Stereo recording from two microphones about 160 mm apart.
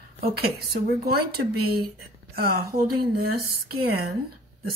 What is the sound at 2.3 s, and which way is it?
A woman's voice, 70° right (ahead or behind).